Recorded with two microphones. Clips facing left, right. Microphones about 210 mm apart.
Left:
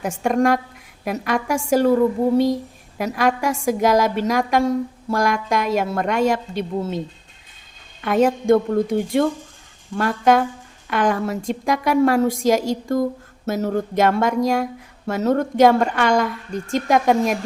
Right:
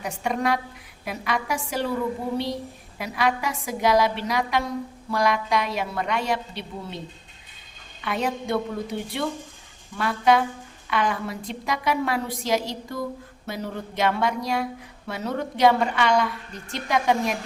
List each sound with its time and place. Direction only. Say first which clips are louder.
0.0 s speech: left 7 dB; 50° left (ahead or behind)
3.0 s speech: left 5 dB; 45° left (ahead or behind)
8.0 s speech: left 10 dB; 45° left (ahead or behind)